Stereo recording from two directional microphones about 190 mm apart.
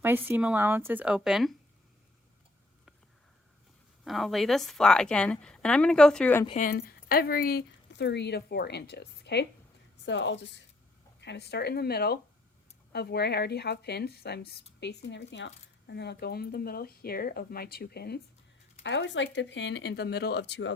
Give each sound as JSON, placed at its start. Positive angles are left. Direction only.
{"t": 0.0, "sound": "speech", "side_deg": -10}
{"t": 4.0, "sound": "a woman's voice", "side_deg": 0}
{"t": 6.6, "sound": "speech", "side_deg": 50}
{"t": 18.8, "sound": "speech", "side_deg": 70}